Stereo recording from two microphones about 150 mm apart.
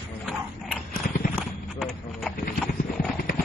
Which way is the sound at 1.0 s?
75° left (ahead or behind).